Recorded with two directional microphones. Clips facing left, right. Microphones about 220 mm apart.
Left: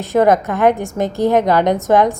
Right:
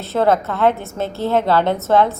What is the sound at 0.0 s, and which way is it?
A woman's voice, 15° left (ahead or behind).